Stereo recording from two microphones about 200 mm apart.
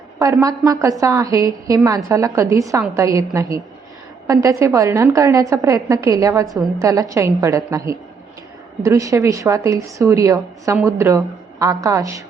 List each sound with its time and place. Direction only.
0.2 s a woman's voice: 15° right (ahead or behind)